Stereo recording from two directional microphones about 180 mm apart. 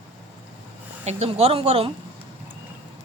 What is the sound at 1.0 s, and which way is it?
Speech, 35° right (ahead or behind).